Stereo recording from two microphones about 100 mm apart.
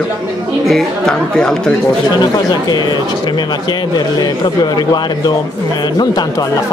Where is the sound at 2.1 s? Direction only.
45° left (ahead or behind).